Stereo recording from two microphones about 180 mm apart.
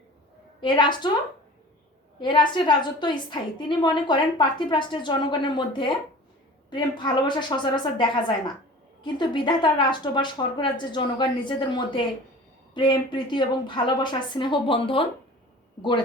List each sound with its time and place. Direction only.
0.6 s a woman's voice: 25° left (ahead or behind)
2.1 s a woman's voice: 25° left (ahead or behind)